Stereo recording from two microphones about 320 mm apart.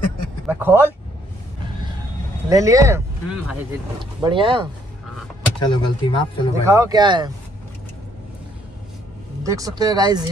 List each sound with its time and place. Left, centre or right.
0.5 s speech: centre
2.5 s speech: centre
4.0 s speech: centre
5.6 s speech: centre
6.6 s speech: centre
9.4 s speech: centre